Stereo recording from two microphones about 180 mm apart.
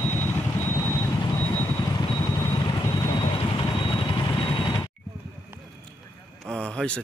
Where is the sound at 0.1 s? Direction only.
10° left (ahead or behind).